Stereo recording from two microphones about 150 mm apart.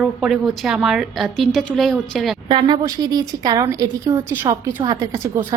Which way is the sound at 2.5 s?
35° right (ahead or behind).